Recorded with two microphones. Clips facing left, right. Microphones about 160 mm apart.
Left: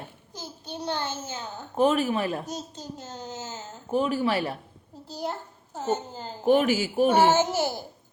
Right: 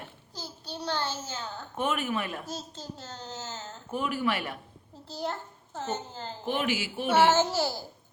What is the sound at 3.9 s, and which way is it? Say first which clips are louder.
Speech: left 5 dB; 30° left (ahead or behind).